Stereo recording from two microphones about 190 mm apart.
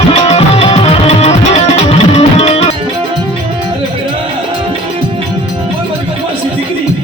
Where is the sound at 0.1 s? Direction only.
35° left (ahead or behind).